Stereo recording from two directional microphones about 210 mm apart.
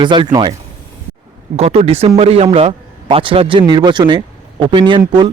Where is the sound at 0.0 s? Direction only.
20° right (ahead or behind).